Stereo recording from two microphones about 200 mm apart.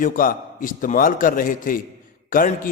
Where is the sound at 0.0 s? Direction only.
45° left (ahead or behind).